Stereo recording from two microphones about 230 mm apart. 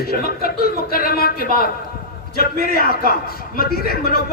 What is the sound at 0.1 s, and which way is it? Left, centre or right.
A man's voice, left.